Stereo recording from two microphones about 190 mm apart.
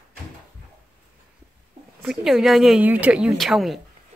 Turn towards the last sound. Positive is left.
turn(degrees=0)  # may be behind; listen again after turning